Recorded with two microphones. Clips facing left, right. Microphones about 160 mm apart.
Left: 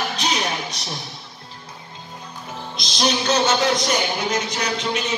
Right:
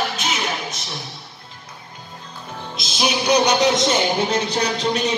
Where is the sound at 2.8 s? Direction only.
5° right (ahead or behind).